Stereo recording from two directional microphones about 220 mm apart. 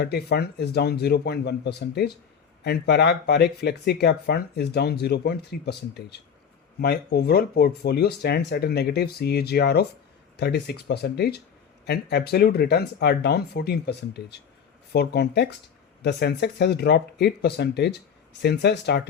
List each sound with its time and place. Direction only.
0.0 s speech: 50° left (ahead or behind)